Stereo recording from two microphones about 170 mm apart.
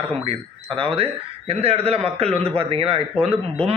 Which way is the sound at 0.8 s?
35° right (ahead or behind).